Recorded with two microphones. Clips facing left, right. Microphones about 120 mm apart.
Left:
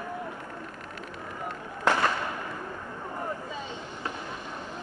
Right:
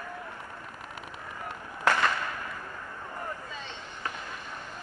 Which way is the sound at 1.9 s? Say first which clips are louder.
Left 1 dB; 20° left (ahead or behind).